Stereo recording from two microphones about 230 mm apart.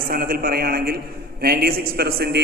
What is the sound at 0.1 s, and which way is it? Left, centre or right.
A man's voice, right.